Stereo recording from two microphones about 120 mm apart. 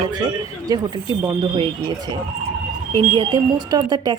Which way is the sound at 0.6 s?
30° right (ahead or behind).